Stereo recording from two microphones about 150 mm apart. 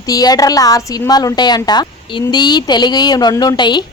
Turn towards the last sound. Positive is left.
turn(degrees=30)  # may be behind; listen again after turning